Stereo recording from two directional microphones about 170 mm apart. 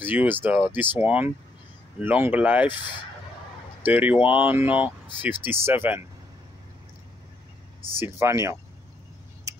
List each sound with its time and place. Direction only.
0.0 s speech: 10° right (ahead or behind)
3.8 s speech: 10° right (ahead or behind)
8.0 s speech: 15° right (ahead or behind)
9.5 s tick-tock: 20° right (ahead or behind)